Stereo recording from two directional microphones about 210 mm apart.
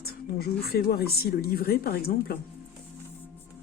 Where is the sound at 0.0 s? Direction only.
45° left (ahead or behind).